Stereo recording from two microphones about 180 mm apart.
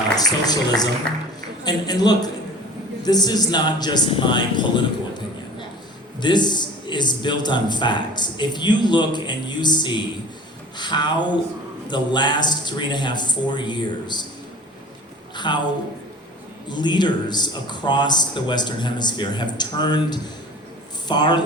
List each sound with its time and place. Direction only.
0.2 s a man's voice: 20° left (ahead or behind)
6.2 s a man's voice: 25° left (ahead or behind)
15.4 s a man's voice: 25° left (ahead or behind)
16.6 s a man's voice: 25° left (ahead or behind)